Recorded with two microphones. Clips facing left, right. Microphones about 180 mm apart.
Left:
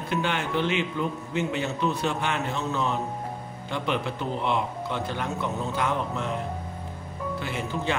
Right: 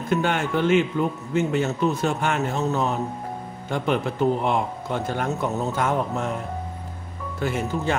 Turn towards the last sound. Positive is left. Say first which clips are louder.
# right 4 dB
turn(degrees=-45)  # may be behind; listen again after turning